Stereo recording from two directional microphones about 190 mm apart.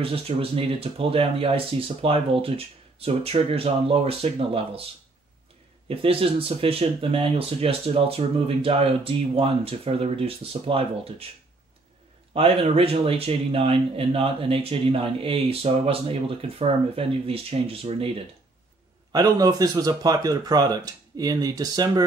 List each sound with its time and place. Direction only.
0.0 s speech: 30° right (ahead or behind)
5.9 s speech: 30° right (ahead or behind)
12.4 s speech: 30° right (ahead or behind)
19.1 s speech: 20° right (ahead or behind)